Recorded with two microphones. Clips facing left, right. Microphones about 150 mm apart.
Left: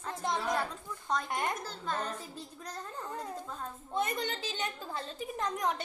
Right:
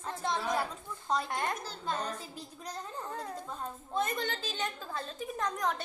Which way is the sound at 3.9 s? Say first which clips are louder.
Even; 20° left (ahead or behind).